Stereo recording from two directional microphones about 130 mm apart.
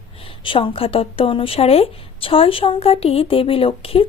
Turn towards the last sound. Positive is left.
turn(degrees=45)  # may be behind; listen again after turning